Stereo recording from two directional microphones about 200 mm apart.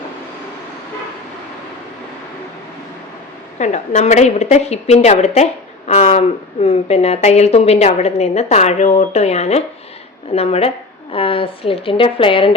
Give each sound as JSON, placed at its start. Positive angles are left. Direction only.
{"t": 3.6, "sound": "a woman's voice", "side_deg": 35}